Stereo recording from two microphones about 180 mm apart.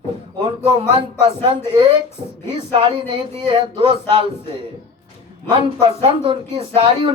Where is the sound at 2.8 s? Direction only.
30° right (ahead or behind).